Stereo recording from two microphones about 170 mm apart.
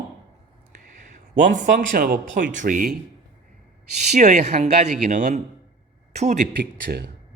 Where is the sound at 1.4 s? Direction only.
50° right (ahead or behind).